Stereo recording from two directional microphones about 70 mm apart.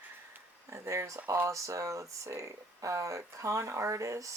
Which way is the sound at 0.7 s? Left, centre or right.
Right.